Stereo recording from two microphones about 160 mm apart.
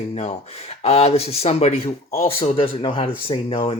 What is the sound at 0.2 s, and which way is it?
Speech, 45° left (ahead or behind).